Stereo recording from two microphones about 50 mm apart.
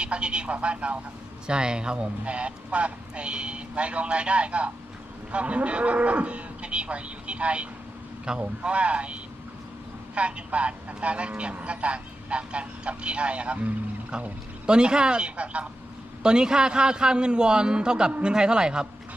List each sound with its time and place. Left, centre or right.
0.0 s speech: right
10.2 s a man's voice: right